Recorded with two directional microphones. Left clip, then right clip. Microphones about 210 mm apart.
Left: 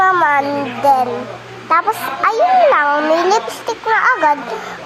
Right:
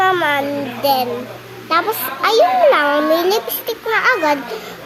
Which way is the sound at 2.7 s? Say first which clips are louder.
Left 1 dB; 25° right (ahead or behind).